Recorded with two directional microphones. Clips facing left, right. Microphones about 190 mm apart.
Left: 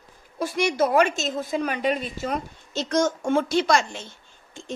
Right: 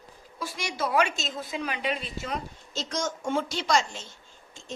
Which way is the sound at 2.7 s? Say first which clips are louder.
Left 9 dB; 55° left (ahead or behind).